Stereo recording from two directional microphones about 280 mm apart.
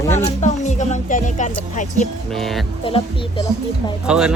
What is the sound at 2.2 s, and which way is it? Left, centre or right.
Speech, centre.